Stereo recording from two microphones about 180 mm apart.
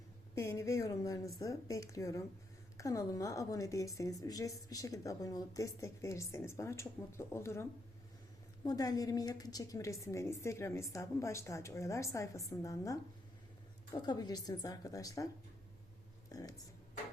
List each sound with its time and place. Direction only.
0.3 s a woman's voice: 15° left (ahead or behind)
16.3 s speech: 20° left (ahead or behind)